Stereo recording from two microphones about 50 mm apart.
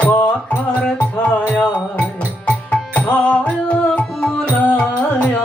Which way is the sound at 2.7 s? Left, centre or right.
Left.